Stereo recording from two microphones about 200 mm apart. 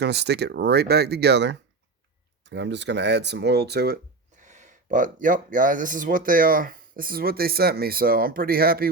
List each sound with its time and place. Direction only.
0.0 s speech: 55° right (ahead or behind)
4.4 s speech: 35° right (ahead or behind)